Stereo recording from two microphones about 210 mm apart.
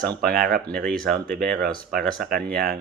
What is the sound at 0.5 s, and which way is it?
Speech, 5° left (ahead or behind).